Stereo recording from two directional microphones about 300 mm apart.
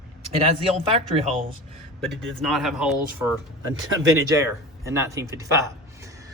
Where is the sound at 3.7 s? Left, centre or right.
Right.